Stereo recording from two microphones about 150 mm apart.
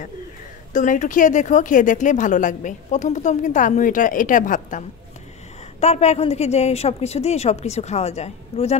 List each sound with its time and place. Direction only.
0.7 s speech: 55° left (ahead or behind)
5.8 s a woman's voice: 45° left (ahead or behind)